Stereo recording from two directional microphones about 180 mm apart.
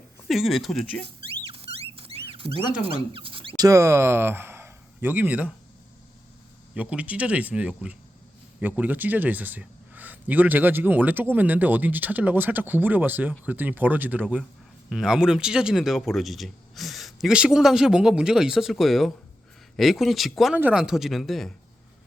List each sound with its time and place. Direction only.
0.3 s speech: centre (ahead or behind)
2.0 s a sound: 30° right (ahead or behind)
2.8 s speech: 30° right (ahead or behind); by 5.5 s 5° right (ahead or behind)
6.7 s a man's voice: 10° right (ahead or behind)